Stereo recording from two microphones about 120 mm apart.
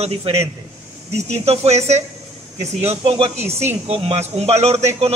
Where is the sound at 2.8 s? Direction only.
50° right (ahead or behind).